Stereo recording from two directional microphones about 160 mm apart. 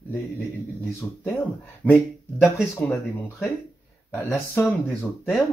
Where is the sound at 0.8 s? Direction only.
10° left (ahead or behind).